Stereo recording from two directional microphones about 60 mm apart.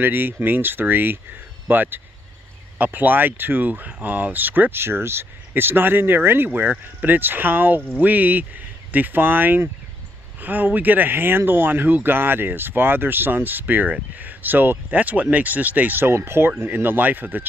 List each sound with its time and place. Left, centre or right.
0.0 s speech: right
16.1 s speech: right